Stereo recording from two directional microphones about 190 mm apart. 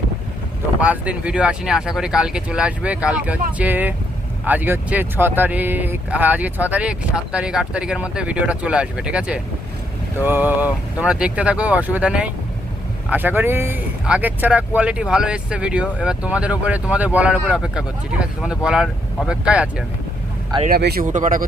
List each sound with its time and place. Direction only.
0.8 s speech: 5° right (ahead or behind)
20.7 s speech: 55° right (ahead or behind)